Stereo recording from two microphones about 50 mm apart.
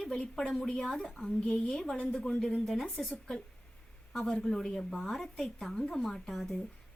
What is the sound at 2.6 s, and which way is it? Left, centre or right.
A woman's voice, centre.